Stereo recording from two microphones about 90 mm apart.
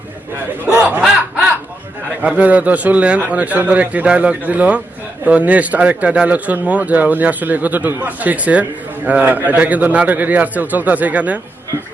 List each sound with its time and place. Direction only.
1.0 s snicker: 5° right (ahead or behind)
2.2 s speech: 15° right (ahead or behind)